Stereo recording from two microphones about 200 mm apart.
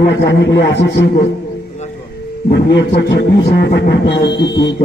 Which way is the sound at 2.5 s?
60° left (ahead or behind).